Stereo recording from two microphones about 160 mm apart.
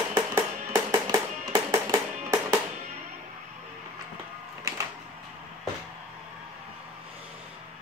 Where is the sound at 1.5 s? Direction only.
20° right (ahead or behind).